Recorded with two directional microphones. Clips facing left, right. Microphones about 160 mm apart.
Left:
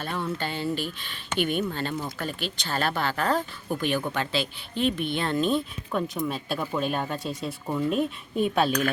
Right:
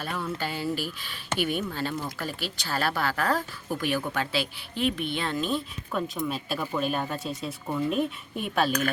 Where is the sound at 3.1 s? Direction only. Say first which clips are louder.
Left 1 dB; 20° left (ahead or behind).